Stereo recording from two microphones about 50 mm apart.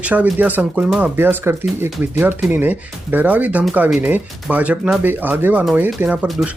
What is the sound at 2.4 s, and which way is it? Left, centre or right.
Speech, right.